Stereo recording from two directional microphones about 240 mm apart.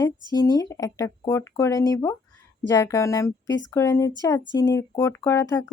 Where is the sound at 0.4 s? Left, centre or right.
Centre.